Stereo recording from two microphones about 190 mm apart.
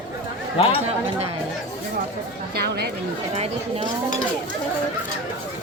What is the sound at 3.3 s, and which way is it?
Chatter, 35° right (ahead or behind).